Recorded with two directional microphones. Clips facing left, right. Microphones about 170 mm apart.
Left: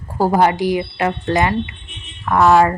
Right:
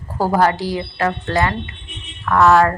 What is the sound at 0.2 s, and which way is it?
Speech, 20° left (ahead or behind).